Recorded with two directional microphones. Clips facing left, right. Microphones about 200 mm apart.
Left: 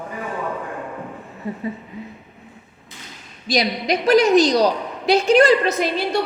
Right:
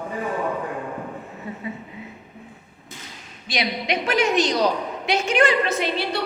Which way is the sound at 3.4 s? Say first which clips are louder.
Left 5 dB; 40° left (ahead or behind).